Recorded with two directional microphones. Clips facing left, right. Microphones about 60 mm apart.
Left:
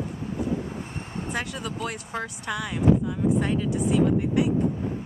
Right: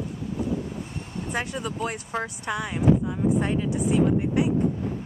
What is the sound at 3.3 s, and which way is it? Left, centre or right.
Speech, centre.